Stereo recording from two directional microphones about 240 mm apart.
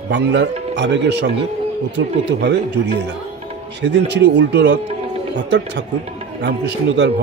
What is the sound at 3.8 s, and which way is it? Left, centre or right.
Speech, right.